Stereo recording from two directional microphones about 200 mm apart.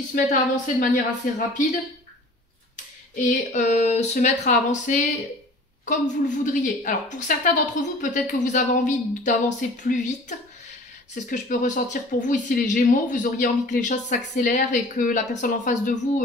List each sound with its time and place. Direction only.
0.1 s speech: 40° left (ahead or behind)
3.2 s speech: 35° left (ahead or behind)